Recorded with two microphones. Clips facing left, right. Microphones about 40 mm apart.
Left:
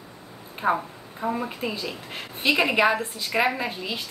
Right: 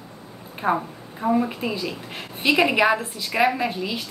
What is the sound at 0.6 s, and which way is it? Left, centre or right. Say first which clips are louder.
Speech: right 1 dB; right.